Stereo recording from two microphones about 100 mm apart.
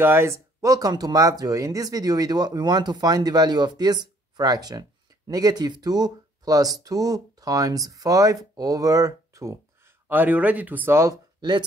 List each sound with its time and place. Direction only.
0.0 s speech: 25° right (ahead or behind)
10.0 s speech: 15° right (ahead or behind)